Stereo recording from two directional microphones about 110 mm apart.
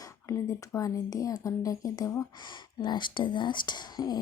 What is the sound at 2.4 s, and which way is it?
Speech, 45° left (ahead or behind).